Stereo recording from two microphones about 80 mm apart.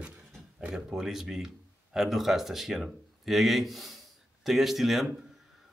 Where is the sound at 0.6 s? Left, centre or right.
Centre.